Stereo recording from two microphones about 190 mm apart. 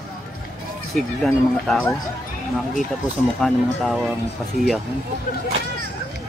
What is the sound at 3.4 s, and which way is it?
Speech, centre (ahead or behind).